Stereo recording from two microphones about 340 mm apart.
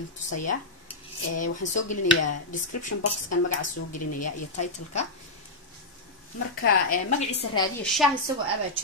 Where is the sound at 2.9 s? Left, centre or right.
Left.